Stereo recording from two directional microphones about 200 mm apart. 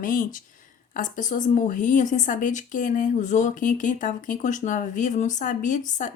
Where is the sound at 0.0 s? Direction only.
45° left (ahead or behind).